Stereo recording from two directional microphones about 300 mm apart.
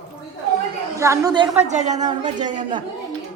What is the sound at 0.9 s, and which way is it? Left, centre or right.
A man's voice, centre.